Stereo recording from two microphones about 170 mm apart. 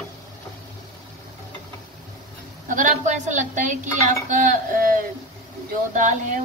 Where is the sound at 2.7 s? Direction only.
50° right (ahead or behind).